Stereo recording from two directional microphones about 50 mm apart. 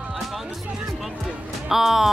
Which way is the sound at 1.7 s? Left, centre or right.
Centre.